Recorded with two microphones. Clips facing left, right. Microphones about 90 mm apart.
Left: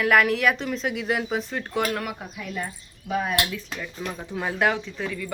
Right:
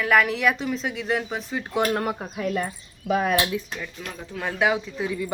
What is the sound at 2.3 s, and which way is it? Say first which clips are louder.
Speech: right 6 dB; 65° right (ahead or behind).